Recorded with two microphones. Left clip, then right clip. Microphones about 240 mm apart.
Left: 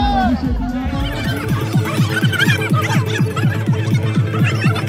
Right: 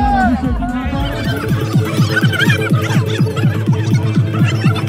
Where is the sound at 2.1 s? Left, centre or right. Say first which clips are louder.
Right 2 dB; centre.